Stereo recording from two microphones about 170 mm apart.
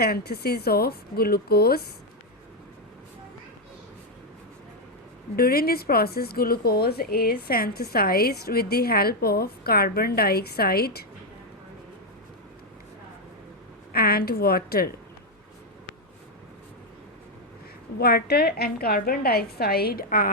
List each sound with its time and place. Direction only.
0.0 s speech: 65° left (ahead or behind)
5.4 s speech: 65° left (ahead or behind)
13.9 s speech: 65° left (ahead or behind)
17.9 s speech: 65° left (ahead or behind)